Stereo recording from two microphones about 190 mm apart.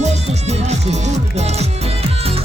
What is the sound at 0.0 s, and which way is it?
Music, 35° right (ahead or behind).